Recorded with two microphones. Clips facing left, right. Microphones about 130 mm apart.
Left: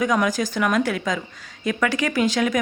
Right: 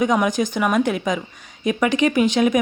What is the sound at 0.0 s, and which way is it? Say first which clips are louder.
A woman's voice: right 2 dB; 20° right (ahead or behind).